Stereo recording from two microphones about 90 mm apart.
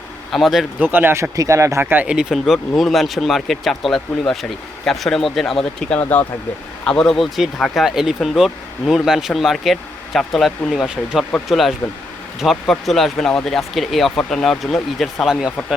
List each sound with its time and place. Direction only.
0.3 s speech: centre (ahead or behind)
0.8 s speech: 20° right (ahead or behind)
1.8 s speech: 20° right (ahead or behind)
2.3 s speech: centre (ahead or behind)
6.0 s speech: 20° left (ahead or behind)
6.8 s speech: 10° left (ahead or behind)